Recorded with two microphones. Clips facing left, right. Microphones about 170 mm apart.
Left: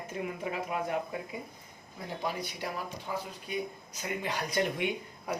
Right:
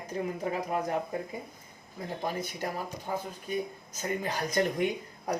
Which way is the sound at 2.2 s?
45° right (ahead or behind).